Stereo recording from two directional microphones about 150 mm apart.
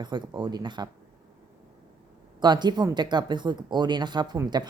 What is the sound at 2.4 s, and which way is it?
Speech, 30° right (ahead or behind).